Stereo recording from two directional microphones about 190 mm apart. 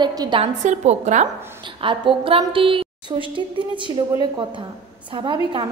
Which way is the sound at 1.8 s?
25° right (ahead or behind).